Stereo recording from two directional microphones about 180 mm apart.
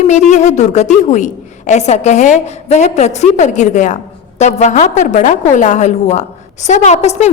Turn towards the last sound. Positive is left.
turn(degrees=40)  # may be behind; listen again after turning